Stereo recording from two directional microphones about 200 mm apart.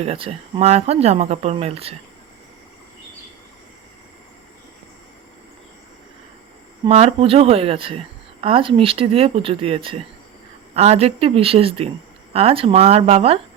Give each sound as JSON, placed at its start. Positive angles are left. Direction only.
{"t": 0.0, "sound": "a woman's voice", "side_deg": -30}
{"t": 6.8, "sound": "a woman's voice", "side_deg": -30}